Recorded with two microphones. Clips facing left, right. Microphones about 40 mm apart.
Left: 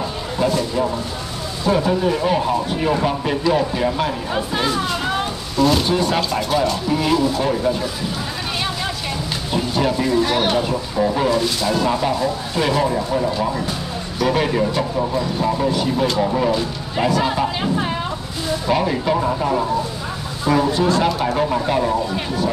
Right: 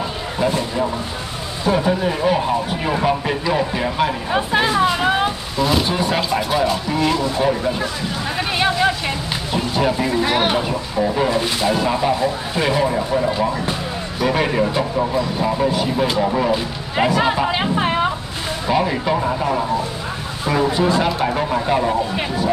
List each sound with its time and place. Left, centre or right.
1.6 s speech: centre
4.4 s a sound: right
5.6 s speech: centre
8.5 s vehicle: right
9.5 s speech: centre
16.9 s speech: right
18.7 s speech: centre